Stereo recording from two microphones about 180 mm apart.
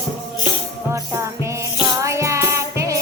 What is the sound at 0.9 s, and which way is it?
Music, 15° right (ahead or behind).